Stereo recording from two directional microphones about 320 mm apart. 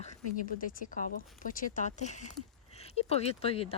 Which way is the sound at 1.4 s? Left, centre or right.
Left.